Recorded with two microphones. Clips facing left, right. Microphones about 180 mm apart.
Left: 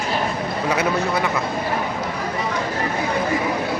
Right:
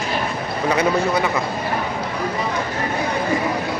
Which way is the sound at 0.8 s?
Centre (ahead or behind).